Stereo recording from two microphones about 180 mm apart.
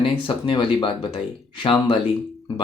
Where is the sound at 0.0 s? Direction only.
30° left (ahead or behind).